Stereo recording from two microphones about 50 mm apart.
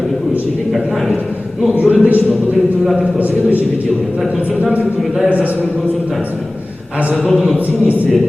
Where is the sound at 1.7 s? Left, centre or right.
Right.